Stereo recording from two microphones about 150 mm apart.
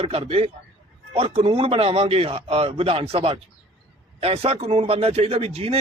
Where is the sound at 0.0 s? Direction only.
40° right (ahead or behind).